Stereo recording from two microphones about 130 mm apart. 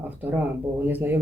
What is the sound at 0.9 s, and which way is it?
Speech, 15° right (ahead or behind).